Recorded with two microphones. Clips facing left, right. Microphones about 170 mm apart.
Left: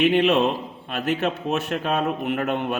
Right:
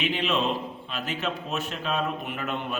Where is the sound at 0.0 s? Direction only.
60° left (ahead or behind).